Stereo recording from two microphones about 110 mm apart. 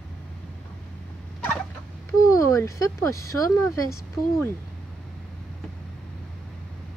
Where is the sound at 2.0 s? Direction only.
30° left (ahead or behind).